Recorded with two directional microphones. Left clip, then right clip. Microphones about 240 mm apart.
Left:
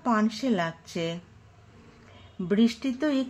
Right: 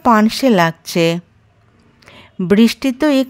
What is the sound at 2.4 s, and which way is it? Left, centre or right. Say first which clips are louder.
Speech: right 12 dB; right.